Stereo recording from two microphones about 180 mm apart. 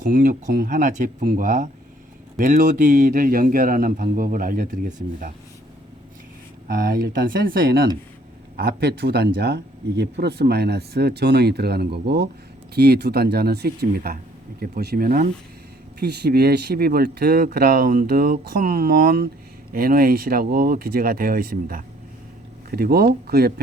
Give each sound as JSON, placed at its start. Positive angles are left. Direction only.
{"t": 0.0, "sound": "speech", "side_deg": -50}
{"t": 6.7, "sound": "speech", "side_deg": -50}
{"t": 16.0, "sound": "speech", "side_deg": -65}